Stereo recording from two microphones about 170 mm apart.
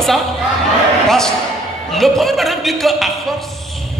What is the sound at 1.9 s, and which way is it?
A man's voice, centre (ahead or behind).